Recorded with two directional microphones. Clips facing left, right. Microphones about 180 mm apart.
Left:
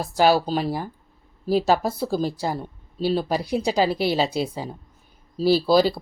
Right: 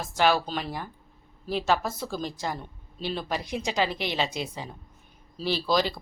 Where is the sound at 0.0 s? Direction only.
35° left (ahead or behind).